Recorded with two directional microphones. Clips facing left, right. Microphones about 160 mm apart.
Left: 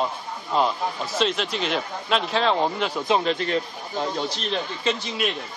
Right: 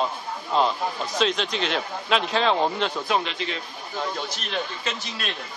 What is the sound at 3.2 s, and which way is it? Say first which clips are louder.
Speech: left 8 dB; 45° left (ahead or behind).